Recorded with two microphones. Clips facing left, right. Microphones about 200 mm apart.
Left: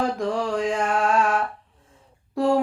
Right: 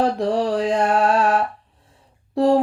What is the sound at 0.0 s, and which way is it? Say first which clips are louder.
Music: right 5 dB; 35° right (ahead or behind).